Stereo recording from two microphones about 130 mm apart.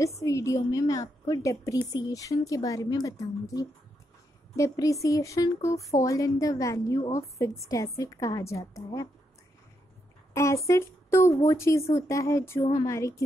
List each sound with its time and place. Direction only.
0.2 s a woman's voice: 25° left (ahead or behind)
10.3 s a woman's voice: 20° left (ahead or behind)